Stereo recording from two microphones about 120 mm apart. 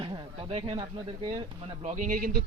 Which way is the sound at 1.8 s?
90° right.